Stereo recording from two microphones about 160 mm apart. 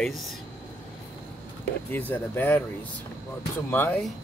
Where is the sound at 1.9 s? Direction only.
15° left (ahead or behind).